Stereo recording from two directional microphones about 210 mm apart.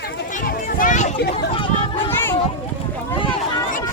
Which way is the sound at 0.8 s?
35° left (ahead or behind).